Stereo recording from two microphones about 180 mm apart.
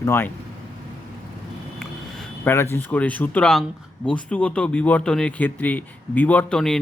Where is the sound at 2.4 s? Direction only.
15° left (ahead or behind).